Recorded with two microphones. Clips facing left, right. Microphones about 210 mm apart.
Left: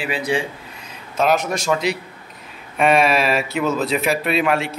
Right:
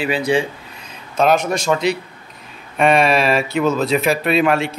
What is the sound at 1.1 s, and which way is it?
Speech, centre (ahead or behind).